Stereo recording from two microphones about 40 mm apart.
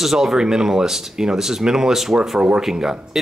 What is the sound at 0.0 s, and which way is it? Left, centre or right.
Speech, centre.